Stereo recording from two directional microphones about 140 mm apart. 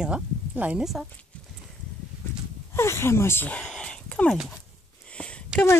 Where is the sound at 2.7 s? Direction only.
15° left (ahead or behind).